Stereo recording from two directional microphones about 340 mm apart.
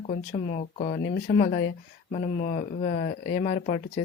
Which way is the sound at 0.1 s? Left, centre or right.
Centre.